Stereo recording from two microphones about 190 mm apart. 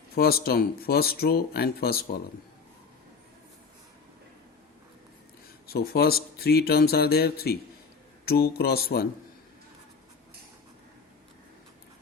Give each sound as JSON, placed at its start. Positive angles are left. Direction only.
{"t": 0.2, "sound": "speech", "side_deg": 50}
{"t": 5.6, "sound": "speech", "side_deg": 55}